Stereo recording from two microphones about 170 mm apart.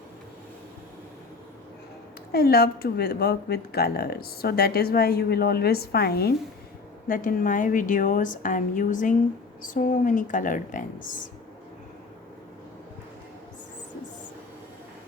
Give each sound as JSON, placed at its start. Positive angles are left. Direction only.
{"t": 2.3, "sound": "speech", "side_deg": 65}
{"t": 7.1, "sound": "a woman's voice", "side_deg": 55}